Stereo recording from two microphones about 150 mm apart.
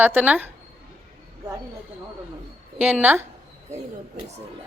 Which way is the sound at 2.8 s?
10° right (ahead or behind).